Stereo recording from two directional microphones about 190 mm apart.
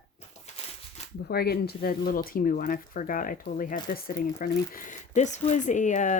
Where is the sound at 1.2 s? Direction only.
55° left (ahead or behind).